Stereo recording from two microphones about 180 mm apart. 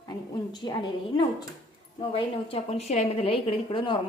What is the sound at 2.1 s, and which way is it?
A woman's voice, 35° left (ahead or behind).